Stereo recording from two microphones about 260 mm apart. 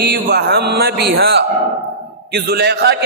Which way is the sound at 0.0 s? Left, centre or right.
Right.